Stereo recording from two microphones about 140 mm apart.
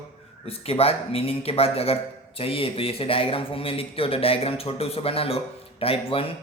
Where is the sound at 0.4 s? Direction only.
45° left (ahead or behind).